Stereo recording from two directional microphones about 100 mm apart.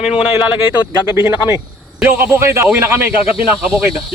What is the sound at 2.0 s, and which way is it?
Speech, 20° right (ahead or behind).